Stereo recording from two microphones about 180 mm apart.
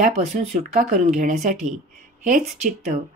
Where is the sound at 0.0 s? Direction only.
35° right (ahead or behind).